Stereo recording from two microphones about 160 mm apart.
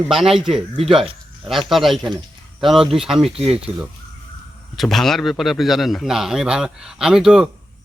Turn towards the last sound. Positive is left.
turn(degrees=-5)  # may be behind; listen again after turning